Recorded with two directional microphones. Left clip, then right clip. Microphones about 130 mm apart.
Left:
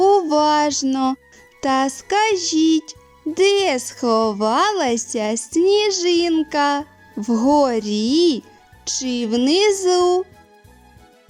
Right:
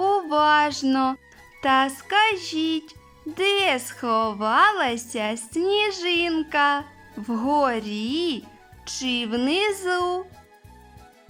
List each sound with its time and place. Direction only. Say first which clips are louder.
0.0 s music: left 5 dB; 40° left (ahead or behind)
1.6 s a woman's voice: left 1 dB; 40° left (ahead or behind)